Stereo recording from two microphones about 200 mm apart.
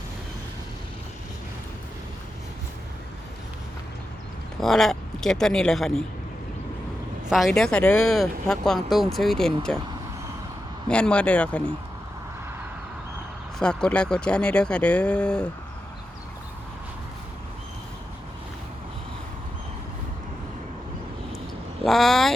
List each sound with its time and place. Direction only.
4.6 s speech: centre (ahead or behind)
7.3 s speech: centre (ahead or behind)
10.8 s speech: 5° left (ahead or behind)
13.6 s speech: 5° left (ahead or behind)
21.8 s speech: centre (ahead or behind)